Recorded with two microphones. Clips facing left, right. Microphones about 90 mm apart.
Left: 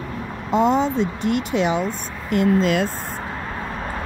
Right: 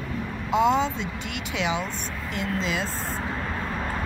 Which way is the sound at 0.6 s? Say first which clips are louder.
Left 4 dB; 40° left (ahead or behind).